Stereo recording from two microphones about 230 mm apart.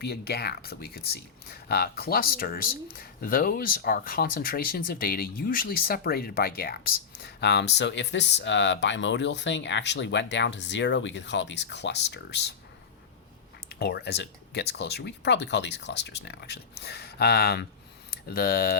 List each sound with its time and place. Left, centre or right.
0.0 s speech: left
13.7 s speech: left